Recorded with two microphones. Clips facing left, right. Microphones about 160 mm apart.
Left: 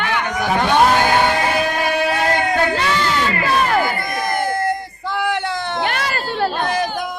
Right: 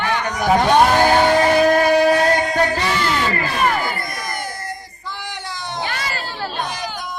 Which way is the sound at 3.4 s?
55° left (ahead or behind).